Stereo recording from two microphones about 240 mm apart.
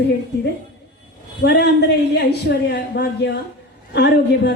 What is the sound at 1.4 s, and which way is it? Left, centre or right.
A man's voice, left.